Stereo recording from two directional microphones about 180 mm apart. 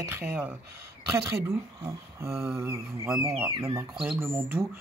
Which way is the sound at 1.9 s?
15° right (ahead or behind).